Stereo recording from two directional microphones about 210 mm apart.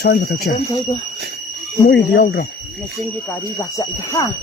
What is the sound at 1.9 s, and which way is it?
Speech, 55° left (ahead or behind).